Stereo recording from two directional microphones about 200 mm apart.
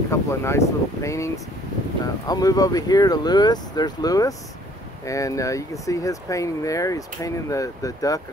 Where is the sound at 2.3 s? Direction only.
20° left (ahead or behind).